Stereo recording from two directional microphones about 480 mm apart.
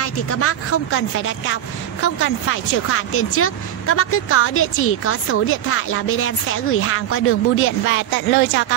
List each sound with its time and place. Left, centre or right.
0.0 s speech: left